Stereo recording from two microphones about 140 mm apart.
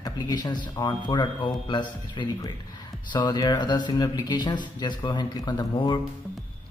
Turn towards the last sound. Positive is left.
turn(degrees=30)  # may be behind; listen again after turning